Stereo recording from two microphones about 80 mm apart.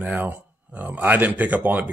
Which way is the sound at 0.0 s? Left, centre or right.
Right.